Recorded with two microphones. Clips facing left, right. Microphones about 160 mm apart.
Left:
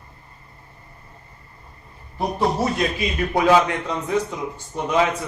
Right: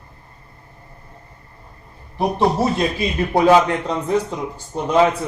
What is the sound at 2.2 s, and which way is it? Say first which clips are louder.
A man's voice: right 4 dB; 25° right (ahead or behind).